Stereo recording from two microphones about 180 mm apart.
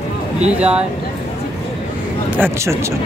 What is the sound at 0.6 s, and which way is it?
Speech, 5° right (ahead or behind).